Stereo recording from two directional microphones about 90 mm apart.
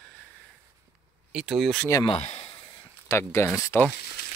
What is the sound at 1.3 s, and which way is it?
Speech, centre (ahead or behind).